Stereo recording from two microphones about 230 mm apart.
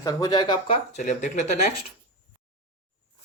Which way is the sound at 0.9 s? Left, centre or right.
Left.